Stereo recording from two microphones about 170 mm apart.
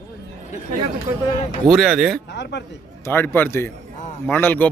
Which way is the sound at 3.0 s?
15° left (ahead or behind).